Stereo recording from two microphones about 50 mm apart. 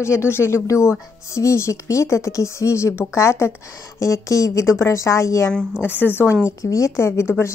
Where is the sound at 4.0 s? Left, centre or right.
Left.